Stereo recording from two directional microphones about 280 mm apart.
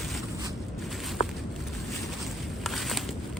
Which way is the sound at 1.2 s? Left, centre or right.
Left.